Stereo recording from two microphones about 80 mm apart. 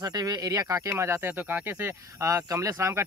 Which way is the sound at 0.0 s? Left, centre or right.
Right.